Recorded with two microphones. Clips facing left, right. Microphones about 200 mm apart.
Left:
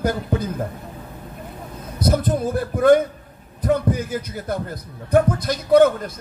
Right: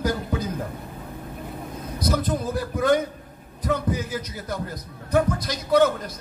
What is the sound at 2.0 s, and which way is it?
A man's voice, 55° left (ahead or behind).